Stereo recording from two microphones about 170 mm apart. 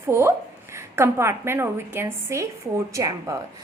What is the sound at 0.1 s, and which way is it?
A woman's voice, 15° right (ahead or behind).